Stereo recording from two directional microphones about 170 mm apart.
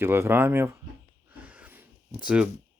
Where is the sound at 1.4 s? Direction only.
10° right (ahead or behind).